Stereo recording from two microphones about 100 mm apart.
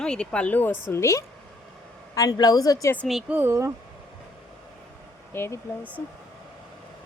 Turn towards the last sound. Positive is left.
turn(degrees=25)  # may be behind; listen again after turning